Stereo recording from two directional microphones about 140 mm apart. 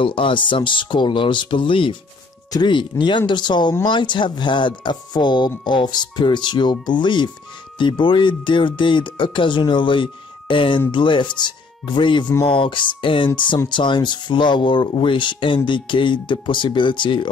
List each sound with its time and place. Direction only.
0.0 s speech: 40° left (ahead or behind)